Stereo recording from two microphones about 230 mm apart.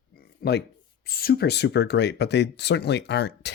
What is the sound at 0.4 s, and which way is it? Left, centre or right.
Speech, left.